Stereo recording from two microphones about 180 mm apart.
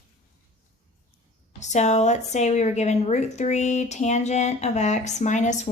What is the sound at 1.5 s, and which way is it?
A woman's voice, 40° left (ahead or behind).